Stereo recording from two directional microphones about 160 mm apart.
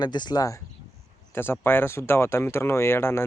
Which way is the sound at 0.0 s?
25° left (ahead or behind).